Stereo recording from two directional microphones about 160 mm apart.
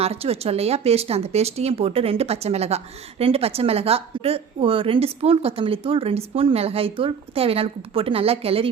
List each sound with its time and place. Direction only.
0.0 s speech: 40° right (ahead or behind)